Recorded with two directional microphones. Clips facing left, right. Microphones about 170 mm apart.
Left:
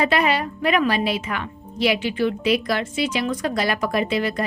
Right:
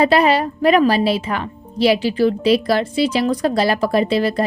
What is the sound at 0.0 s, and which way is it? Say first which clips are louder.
A woman's voice: right 6 dB; 35° right (ahead or behind).